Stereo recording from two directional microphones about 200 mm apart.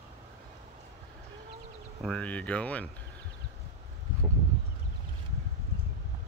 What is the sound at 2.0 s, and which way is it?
Speech, 5° left (ahead or behind).